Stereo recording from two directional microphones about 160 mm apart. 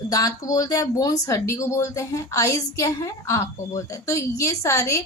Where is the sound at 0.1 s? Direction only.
20° left (ahead or behind).